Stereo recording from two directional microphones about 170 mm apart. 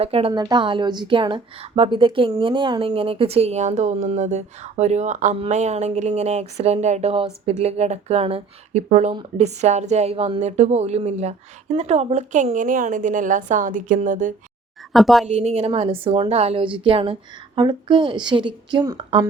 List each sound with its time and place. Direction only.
0.0 s a woman's voice: 35° right (ahead or behind); by 14.3 s 50° right (ahead or behind)
14.9 s speech: centre (ahead or behind)
15.3 s a woman's voice: 40° right (ahead or behind)